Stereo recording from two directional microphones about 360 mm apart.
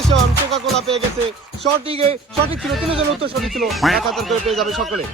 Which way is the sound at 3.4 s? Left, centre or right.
Centre.